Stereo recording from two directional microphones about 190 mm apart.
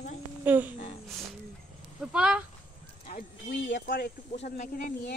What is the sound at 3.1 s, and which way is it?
Speech, 65° left (ahead or behind).